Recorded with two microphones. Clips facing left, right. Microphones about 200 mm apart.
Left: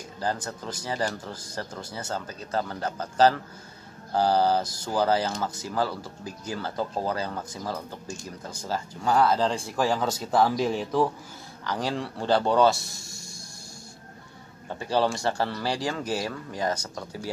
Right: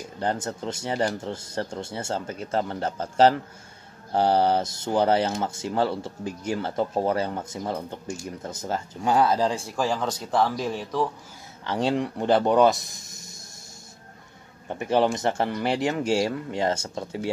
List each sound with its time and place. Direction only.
0.2 s speech: 25° right (ahead or behind)
9.7 s speech: 5° left (ahead or behind)
11.6 s speech: 25° right (ahead or behind)
14.7 s speech: 20° right (ahead or behind)